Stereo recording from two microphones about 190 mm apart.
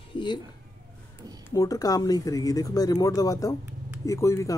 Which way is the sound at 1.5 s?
20° left (ahead or behind).